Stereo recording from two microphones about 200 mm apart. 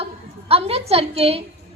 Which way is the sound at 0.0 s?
30° right (ahead or behind).